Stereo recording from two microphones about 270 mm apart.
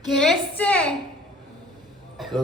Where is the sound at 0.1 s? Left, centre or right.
Centre.